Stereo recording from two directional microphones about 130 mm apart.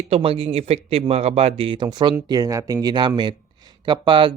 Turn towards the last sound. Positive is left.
turn(degrees=-40)  # may be behind; listen again after turning